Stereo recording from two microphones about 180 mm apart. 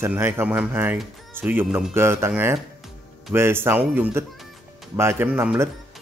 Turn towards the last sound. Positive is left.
turn(degrees=-5)  # may be behind; listen again after turning